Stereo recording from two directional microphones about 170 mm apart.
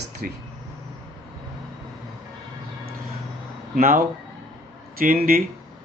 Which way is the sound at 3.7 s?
60° right (ahead or behind).